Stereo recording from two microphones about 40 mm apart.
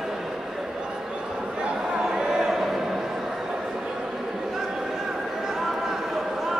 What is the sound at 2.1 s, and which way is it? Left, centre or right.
Music, centre.